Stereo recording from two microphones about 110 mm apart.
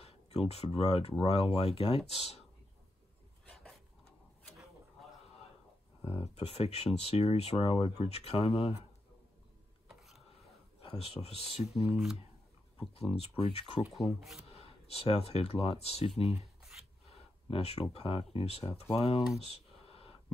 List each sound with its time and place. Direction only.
0.0 s speech: 65° left (ahead or behind)
3.4 s a sound: 5° left (ahead or behind)
6.0 s speech: 65° left (ahead or behind)
9.8 s a sound: centre (ahead or behind)
10.8 s speech: 65° left (ahead or behind)
11.9 s speech: 5° right (ahead or behind)
12.9 s speech: 70° left (ahead or behind)
13.9 s speech: centre (ahead or behind)
14.5 s speech: 65° left (ahead or behind)
16.7 s rub: 10° right (ahead or behind)
17.5 s speech: 65° left (ahead or behind)
19.5 s a sound: 60° left (ahead or behind)